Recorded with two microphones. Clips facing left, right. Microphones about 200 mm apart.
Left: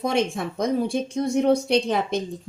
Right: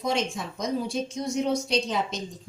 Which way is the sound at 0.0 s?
60° left (ahead or behind).